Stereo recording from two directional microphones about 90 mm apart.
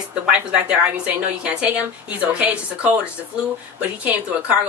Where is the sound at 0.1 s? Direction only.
10° right (ahead or behind).